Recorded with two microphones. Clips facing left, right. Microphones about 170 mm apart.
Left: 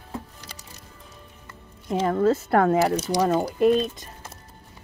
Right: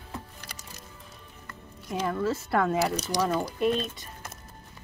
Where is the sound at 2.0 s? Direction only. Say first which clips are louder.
Left 8 dB; 55° left (ahead or behind).